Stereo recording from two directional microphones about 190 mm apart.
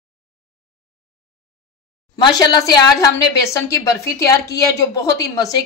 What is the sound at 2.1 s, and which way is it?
Speech, 20° left (ahead or behind).